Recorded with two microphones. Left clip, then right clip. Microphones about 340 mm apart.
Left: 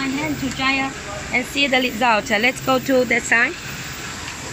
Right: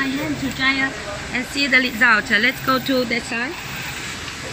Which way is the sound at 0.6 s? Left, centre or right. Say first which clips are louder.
Right 1 dB; centre.